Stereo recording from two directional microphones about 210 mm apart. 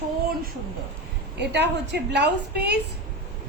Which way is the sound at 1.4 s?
55° right (ahead or behind).